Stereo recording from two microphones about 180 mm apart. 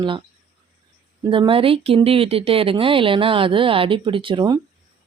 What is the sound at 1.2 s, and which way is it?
Speech, 25° right (ahead or behind).